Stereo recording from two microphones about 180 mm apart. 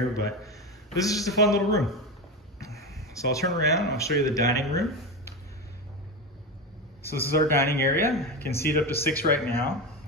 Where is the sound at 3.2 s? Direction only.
20° left (ahead or behind).